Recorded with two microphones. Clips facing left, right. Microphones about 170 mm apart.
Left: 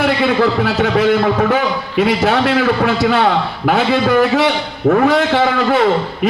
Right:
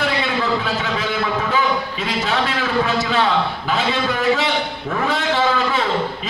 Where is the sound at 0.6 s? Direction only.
60° left (ahead or behind).